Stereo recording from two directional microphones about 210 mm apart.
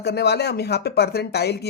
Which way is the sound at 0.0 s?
50° left (ahead or behind).